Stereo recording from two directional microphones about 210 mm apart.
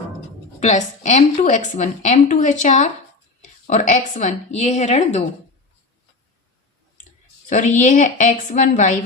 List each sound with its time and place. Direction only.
1.0 s a woman's voice: 35° left (ahead or behind)
7.5 s a woman's voice: 35° left (ahead or behind)